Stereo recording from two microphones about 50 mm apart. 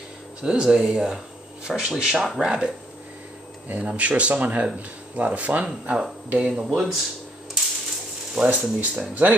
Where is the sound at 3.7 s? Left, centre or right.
Right.